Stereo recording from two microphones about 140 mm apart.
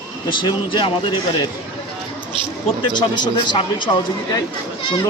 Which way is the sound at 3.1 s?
35° left (ahead or behind).